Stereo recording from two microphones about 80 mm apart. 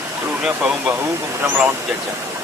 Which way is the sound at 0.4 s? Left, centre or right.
Centre.